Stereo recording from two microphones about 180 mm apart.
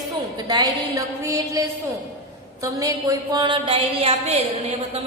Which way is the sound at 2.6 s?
20° right (ahead or behind).